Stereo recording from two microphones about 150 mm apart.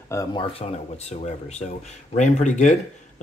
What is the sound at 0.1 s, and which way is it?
Speech, 20° left (ahead or behind).